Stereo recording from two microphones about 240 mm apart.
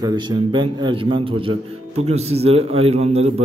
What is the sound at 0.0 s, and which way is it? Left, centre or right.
A man's voice, centre.